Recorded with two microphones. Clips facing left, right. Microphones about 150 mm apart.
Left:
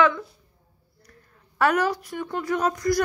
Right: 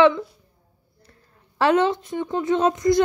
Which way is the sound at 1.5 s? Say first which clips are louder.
Right 3 dB; 25° right (ahead or behind).